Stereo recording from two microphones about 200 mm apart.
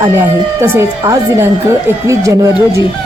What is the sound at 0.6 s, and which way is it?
Speech, 10° right (ahead or behind).